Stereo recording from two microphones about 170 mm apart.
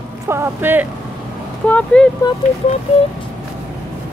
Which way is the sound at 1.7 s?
10° left (ahead or behind).